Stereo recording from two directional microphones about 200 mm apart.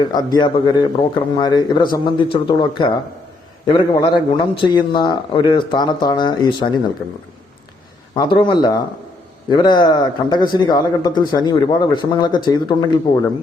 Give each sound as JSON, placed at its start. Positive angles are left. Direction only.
{"t": 0.0, "sound": "speech", "side_deg": 20}
{"t": 8.1, "sound": "speech", "side_deg": 25}